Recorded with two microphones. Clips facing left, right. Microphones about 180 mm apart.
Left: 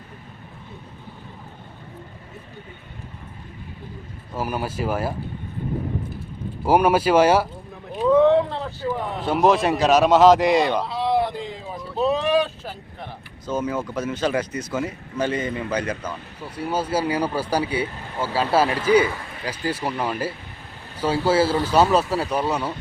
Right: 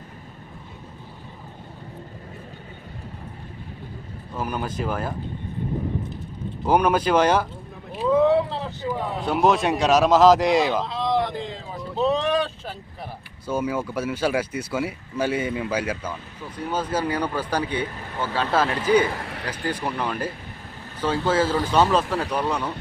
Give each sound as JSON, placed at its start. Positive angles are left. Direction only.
{"t": 4.4, "sound": "speech", "side_deg": 5}
{"t": 6.7, "sound": "speech", "side_deg": 5}
{"t": 7.9, "sound": "a sound", "side_deg": -5}
{"t": 9.2, "sound": "speech", "side_deg": 0}
{"t": 10.8, "sound": "a sound", "side_deg": 10}
{"t": 13.5, "sound": "speech", "side_deg": -10}
{"t": 16.4, "sound": "speech", "side_deg": 10}
{"t": 19.2, "sound": "a sound", "side_deg": -70}
{"t": 19.6, "sound": "speech", "side_deg": 10}